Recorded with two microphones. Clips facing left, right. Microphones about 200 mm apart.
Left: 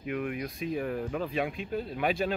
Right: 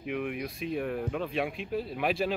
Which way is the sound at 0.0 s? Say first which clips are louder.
Even; centre (ahead or behind).